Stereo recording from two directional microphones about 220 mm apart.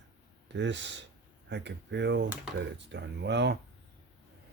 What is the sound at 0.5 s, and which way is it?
Speech, 55° right (ahead or behind).